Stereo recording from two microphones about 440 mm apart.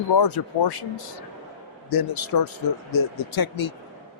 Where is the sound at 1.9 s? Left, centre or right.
Left.